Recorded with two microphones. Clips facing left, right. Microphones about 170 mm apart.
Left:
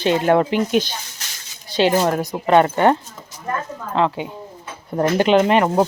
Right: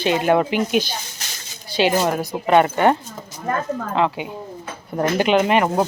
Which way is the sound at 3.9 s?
10° right (ahead or behind).